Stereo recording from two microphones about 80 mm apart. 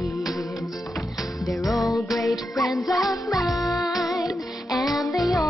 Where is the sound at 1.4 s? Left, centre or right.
Centre.